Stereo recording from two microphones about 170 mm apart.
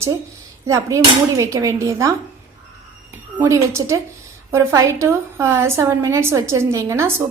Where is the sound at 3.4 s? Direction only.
15° right (ahead or behind).